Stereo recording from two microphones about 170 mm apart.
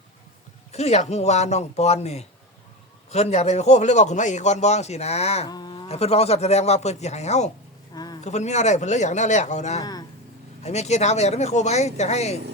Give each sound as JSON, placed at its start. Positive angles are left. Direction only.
{"t": 0.7, "sound": "a man's voice", "side_deg": 40}
{"t": 5.5, "sound": "a man's voice", "side_deg": 25}
{"t": 7.9, "sound": "a sound", "side_deg": 25}
{"t": 8.2, "sound": "a man's voice", "side_deg": 40}